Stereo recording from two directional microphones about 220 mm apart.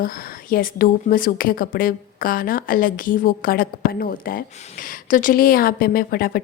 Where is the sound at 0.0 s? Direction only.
40° left (ahead or behind).